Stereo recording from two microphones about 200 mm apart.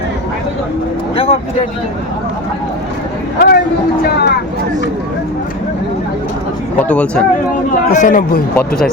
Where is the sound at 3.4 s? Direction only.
55° left (ahead or behind).